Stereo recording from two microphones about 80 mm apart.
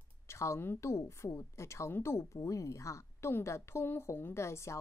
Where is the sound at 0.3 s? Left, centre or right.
Left.